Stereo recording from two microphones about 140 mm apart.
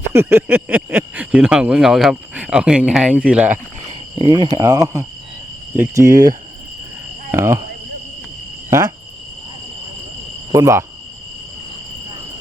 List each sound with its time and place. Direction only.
0.1 s speech: 15° right (ahead or behind)
4.2 s speech: 30° right (ahead or behind)
10.5 s speech: 20° right (ahead or behind)